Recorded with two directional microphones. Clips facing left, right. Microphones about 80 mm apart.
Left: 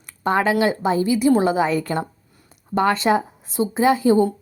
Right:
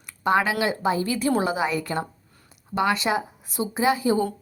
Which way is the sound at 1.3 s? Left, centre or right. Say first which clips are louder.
Left 5 dB; left.